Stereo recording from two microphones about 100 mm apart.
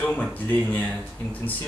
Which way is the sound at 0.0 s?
15° left (ahead or behind).